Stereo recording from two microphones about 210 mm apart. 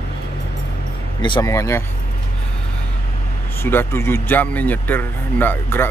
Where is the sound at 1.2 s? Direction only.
20° left (ahead or behind).